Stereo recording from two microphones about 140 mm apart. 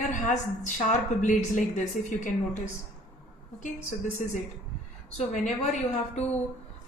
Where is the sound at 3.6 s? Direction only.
65° left (ahead or behind).